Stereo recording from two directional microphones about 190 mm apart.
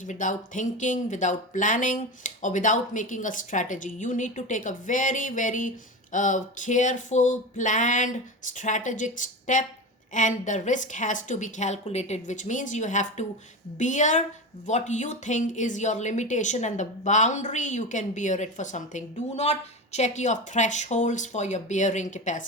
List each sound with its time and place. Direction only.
0.0 s speech: 40° left (ahead or behind)